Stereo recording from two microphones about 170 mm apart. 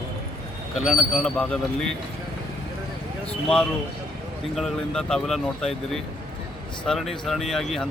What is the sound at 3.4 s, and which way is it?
Speech, 5° left (ahead or behind).